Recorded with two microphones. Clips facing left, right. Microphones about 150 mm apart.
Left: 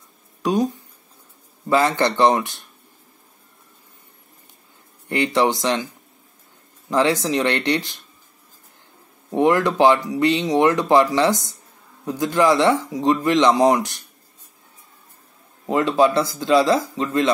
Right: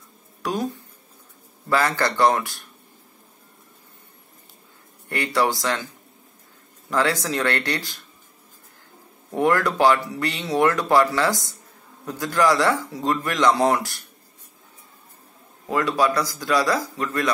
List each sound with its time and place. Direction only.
0.4 s speech: 20° left (ahead or behind)
5.0 s speech: 20° left (ahead or behind)
6.9 s speech: 20° left (ahead or behind)
9.3 s speech: 20° left (ahead or behind)
15.7 s speech: 25° left (ahead or behind)